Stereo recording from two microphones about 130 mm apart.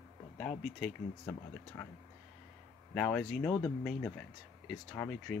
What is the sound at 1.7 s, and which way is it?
Speech, 20° left (ahead or behind).